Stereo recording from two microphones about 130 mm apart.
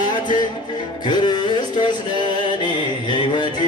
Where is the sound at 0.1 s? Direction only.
35° left (ahead or behind).